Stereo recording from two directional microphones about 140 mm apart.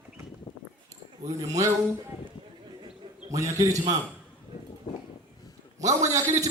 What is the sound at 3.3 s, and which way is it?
Speech, 25° right (ahead or behind).